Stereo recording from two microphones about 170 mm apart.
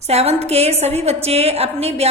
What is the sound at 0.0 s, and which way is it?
A woman's voice, 40° right (ahead or behind).